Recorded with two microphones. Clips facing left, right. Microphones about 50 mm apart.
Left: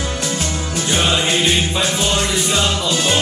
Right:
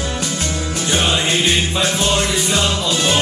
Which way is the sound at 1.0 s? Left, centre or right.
Centre.